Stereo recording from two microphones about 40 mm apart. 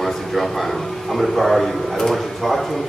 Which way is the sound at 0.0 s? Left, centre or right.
Centre.